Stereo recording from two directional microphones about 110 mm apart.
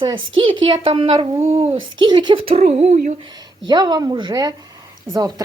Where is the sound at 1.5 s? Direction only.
55° right (ahead or behind).